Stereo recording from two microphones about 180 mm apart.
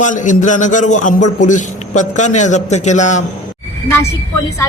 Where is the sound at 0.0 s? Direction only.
45° left (ahead or behind).